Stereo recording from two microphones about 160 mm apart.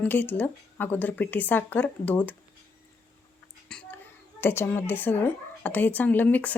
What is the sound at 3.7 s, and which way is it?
A child's voice, 10° left (ahead or behind).